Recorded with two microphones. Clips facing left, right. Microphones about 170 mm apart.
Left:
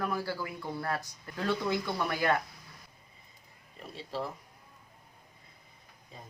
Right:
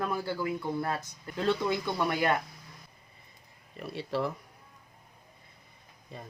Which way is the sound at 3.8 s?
65° right (ahead or behind).